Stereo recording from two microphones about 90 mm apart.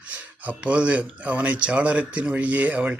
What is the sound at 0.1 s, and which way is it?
Speech, 15° right (ahead or behind).